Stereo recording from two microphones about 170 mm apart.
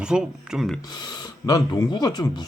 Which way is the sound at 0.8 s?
25° left (ahead or behind).